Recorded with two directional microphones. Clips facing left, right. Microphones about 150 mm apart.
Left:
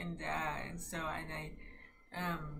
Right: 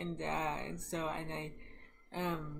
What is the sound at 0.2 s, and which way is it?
Speech, 20° right (ahead or behind).